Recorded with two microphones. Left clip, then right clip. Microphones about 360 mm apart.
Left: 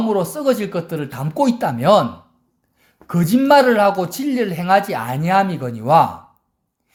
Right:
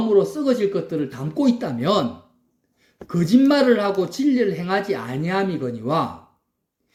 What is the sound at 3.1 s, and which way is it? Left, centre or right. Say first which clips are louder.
Speech: left 4 dB; left.